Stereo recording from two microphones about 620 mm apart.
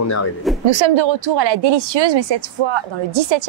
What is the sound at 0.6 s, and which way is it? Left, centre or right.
A woman's voice, right.